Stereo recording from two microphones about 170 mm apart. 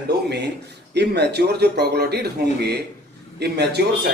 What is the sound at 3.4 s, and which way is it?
Speech, 75° right (ahead or behind).